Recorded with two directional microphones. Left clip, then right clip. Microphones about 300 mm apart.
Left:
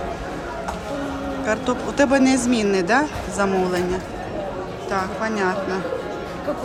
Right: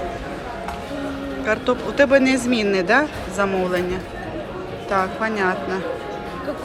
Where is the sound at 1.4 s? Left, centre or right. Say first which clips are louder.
Right 3 dB; centre.